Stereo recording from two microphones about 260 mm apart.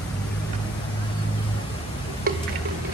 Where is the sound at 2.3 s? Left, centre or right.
Right.